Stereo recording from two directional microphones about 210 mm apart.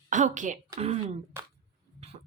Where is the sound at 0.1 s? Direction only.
35° right (ahead or behind).